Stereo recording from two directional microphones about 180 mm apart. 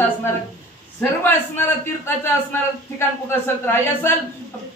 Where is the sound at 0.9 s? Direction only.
10° left (ahead or behind).